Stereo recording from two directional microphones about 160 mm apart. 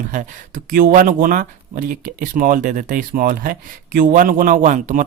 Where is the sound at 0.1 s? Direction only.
55° right (ahead or behind).